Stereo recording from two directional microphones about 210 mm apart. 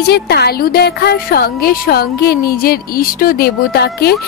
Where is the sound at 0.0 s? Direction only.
50° left (ahead or behind).